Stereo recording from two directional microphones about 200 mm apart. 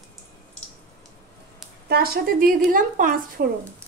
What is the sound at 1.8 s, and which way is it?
Speech, 50° right (ahead or behind).